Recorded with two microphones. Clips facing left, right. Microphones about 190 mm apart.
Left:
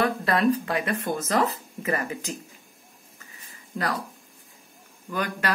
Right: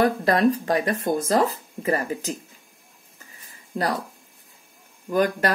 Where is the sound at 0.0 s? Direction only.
40° right (ahead or behind).